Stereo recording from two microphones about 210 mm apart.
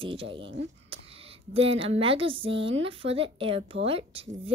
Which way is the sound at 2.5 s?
60° right (ahead or behind).